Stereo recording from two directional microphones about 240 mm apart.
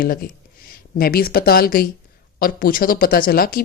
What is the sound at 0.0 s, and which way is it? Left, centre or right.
Speech, left.